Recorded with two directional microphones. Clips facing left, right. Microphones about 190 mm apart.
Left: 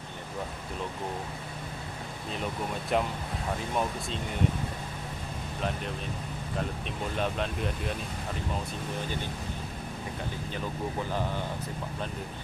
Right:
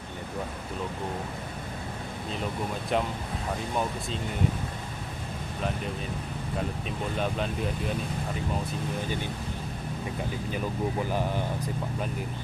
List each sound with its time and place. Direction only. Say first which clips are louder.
2.9 s speech: even; centre (ahead or behind)
7.2 s speech: right 1 dB; centre (ahead or behind)